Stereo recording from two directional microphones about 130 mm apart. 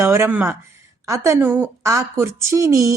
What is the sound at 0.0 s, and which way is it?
A woman's voice, 20° right (ahead or behind).